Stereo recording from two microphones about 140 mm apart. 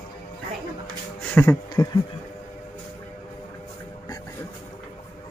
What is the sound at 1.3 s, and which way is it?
Speech, 15° left (ahead or behind).